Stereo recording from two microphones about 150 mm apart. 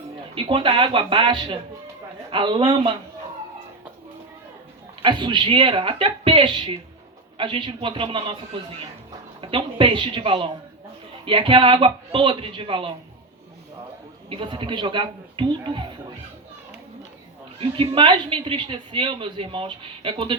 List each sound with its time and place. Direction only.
0.3 s a woman's voice: 35° right (ahead or behind)
5.0 s a woman's voice: 30° right (ahead or behind)
9.4 s a woman's voice: 35° right (ahead or behind)
14.3 s a woman's voice: 35° right (ahead or behind)
17.6 s a woman's voice: 35° right (ahead or behind)